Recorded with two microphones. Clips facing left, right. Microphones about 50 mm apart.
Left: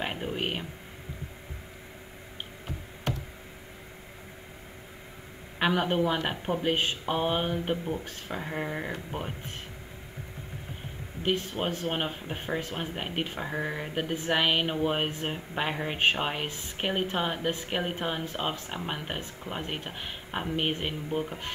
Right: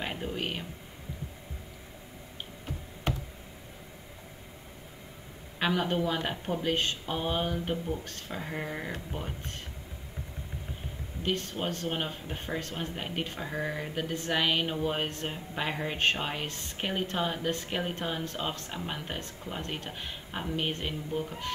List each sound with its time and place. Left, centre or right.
0.0 s speech: left
5.6 s speech: centre
8.9 s speech: left
11.2 s speech: centre